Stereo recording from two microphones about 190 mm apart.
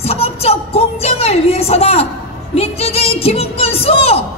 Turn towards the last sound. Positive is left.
turn(degrees=30)  # may be behind; listen again after turning